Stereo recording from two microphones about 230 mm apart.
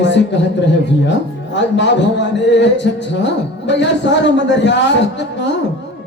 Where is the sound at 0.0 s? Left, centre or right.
Left.